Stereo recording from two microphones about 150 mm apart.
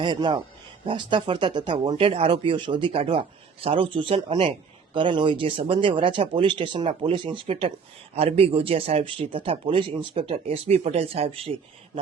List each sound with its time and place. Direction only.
0.0 s speech: 30° right (ahead or behind)